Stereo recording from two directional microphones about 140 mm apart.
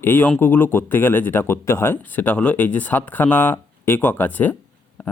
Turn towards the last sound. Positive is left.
turn(degrees=10)  # may be behind; listen again after turning